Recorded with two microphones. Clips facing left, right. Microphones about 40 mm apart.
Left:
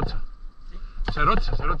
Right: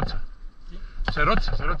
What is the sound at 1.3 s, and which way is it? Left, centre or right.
Speech, right.